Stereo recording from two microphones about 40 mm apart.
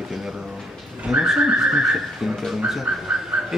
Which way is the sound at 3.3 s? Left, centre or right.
Right.